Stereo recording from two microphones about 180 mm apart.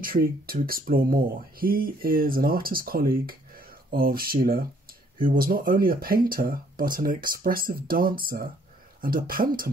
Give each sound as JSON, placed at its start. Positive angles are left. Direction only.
{"t": 0.0, "sound": "speech", "side_deg": -55}